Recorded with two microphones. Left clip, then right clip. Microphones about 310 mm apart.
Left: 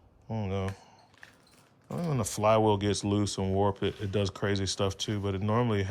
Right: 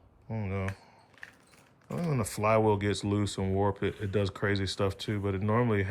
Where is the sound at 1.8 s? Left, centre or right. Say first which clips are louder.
Even; centre.